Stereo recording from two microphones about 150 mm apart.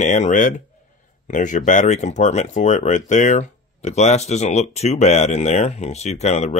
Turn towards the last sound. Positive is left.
turn(degrees=50)  # may be behind; listen again after turning